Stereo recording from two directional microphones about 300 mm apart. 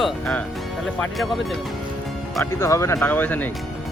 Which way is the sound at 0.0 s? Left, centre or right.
Centre.